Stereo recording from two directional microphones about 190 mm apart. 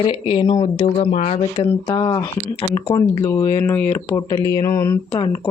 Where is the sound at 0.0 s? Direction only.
30° left (ahead or behind).